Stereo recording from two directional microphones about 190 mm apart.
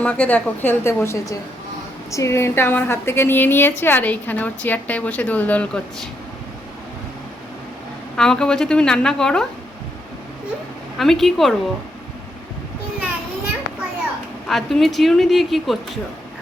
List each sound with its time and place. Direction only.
0.0 s a woman's voice: 5° left (ahead or behind)
8.1 s a woman's voice: 5° left (ahead or behind)
10.9 s a woman's voice: centre (ahead or behind)
14.4 s a woman's voice: centre (ahead or behind)